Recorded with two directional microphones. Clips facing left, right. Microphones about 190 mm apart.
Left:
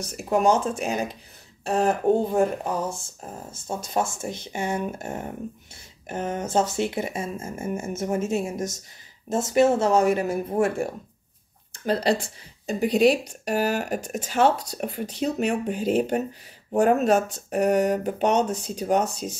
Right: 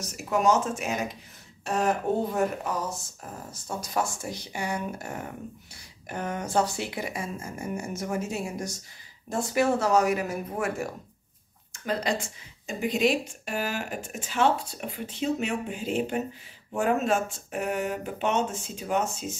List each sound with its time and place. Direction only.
0.0 s speech: 30° left (ahead or behind)